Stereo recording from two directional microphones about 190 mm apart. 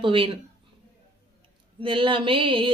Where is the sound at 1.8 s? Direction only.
25° right (ahead or behind).